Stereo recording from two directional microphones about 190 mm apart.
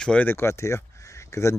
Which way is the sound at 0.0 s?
5° left (ahead or behind).